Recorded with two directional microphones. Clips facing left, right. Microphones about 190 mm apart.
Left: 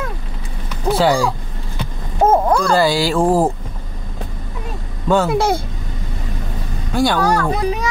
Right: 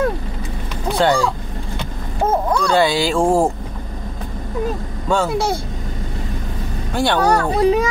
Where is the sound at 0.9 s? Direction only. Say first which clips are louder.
Left 1 dB; 5° left (ahead or behind).